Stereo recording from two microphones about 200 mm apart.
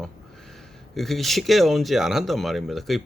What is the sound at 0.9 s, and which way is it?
A man's voice, centre (ahead or behind).